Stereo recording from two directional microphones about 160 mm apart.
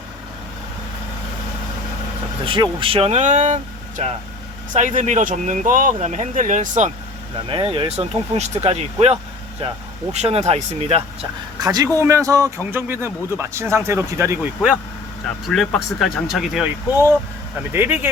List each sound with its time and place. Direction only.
2.4 s speech: 35° right (ahead or behind); by 6.9 s 50° right (ahead or behind)
7.4 s speech: 35° right (ahead or behind)
11.6 s speech: 25° right (ahead or behind)
15.4 s speech: centre (ahead or behind)
17.7 s speech: 15° right (ahead or behind)